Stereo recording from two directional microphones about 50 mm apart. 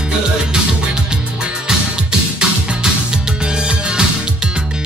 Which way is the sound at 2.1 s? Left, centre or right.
Centre.